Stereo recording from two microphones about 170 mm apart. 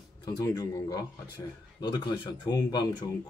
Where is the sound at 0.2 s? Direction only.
20° left (ahead or behind).